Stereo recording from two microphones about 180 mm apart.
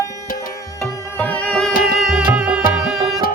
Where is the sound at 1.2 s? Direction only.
5° left (ahead or behind).